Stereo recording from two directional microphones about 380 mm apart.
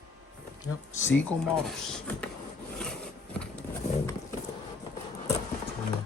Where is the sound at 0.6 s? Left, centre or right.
Centre.